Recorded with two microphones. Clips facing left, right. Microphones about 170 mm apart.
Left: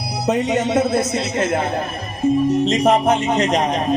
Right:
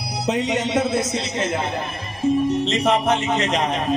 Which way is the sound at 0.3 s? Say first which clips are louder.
Left 4 dB; 55° left (ahead or behind).